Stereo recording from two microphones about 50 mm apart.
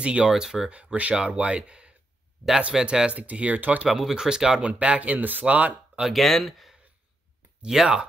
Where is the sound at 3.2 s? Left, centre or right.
Right.